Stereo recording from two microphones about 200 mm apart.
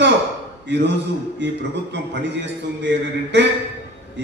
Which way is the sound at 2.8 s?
60° right (ahead or behind).